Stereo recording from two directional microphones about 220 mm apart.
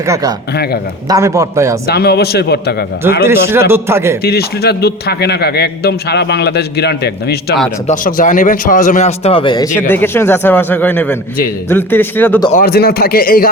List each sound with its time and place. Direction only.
0.0 s a man's voice: 15° right (ahead or behind)
0.5 s a man's voice: 45° left (ahead or behind)
1.0 s a man's voice: 15° right (ahead or behind)
1.9 s a man's voice: 45° left (ahead or behind)
3.5 s a man's voice: 10° right (ahead or behind)
4.2 s a man's voice: 45° left (ahead or behind); by 12.5 s 10° left (ahead or behind)
12.5 s a man's voice: 45° left (ahead or behind)